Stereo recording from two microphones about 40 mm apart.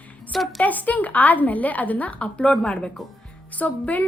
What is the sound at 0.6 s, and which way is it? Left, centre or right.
A woman's voice, left.